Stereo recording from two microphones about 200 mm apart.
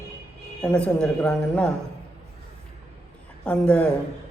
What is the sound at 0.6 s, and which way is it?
A man's voice, 5° left (ahead or behind).